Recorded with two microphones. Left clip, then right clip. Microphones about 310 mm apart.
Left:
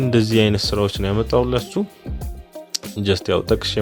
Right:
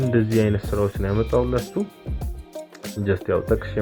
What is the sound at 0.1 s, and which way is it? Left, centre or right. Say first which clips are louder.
Speech: left 4 dB; left.